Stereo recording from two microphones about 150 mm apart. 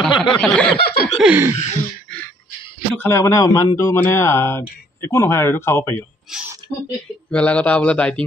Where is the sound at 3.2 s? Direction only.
20° left (ahead or behind).